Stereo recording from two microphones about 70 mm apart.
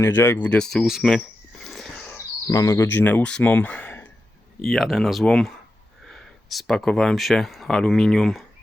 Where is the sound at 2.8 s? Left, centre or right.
Left.